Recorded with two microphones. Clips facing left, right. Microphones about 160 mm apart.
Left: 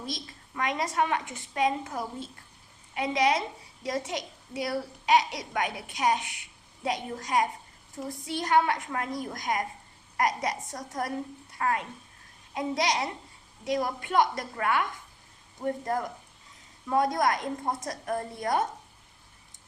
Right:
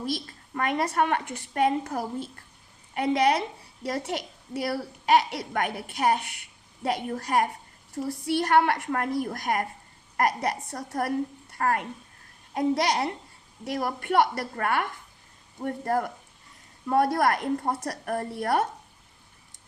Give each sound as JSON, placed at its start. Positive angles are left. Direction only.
{"t": 0.0, "sound": "a woman's voice", "side_deg": -60}